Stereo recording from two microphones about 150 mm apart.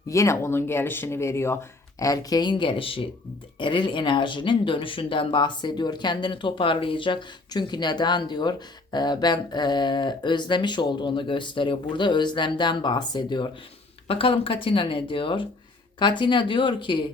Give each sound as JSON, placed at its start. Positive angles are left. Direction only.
{"t": 0.1, "sound": "speech", "side_deg": 20}